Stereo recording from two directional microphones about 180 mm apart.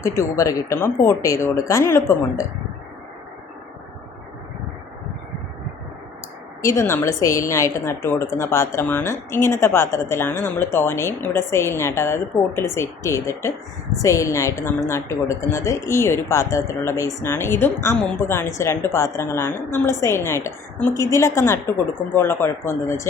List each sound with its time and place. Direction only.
0.2 s a woman's voice: 15° left (ahead or behind)
6.6 s a woman's voice: 15° left (ahead or behind)